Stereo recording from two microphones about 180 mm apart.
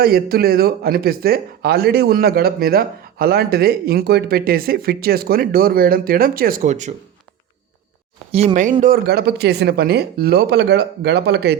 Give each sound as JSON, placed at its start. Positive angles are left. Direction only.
{"t": 0.0, "sound": "speech", "side_deg": -60}
{"t": 8.3, "sound": "speech", "side_deg": -35}
{"t": 8.8, "sound": "speech", "side_deg": -55}